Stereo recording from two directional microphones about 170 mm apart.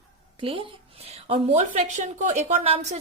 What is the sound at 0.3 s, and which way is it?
A woman's voice, 30° right (ahead or behind).